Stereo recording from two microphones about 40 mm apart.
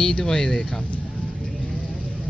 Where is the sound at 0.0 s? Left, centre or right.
Centre.